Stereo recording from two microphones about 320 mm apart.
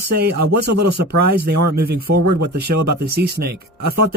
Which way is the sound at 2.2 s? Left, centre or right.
Right.